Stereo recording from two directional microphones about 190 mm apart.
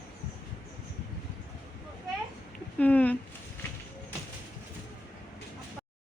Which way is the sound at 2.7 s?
10° left (ahead or behind).